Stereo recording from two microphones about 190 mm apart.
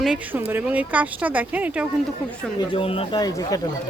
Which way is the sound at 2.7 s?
30° left (ahead or behind).